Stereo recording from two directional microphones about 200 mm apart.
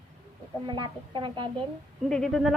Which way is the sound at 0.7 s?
20° right (ahead or behind).